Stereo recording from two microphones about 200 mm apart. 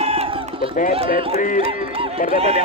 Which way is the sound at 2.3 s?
30° right (ahead or behind).